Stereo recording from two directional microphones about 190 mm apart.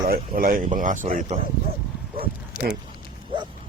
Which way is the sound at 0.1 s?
50° right (ahead or behind).